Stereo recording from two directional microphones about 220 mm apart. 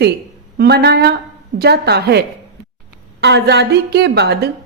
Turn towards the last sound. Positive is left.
turn(degrees=-50)  # may be behind; listen again after turning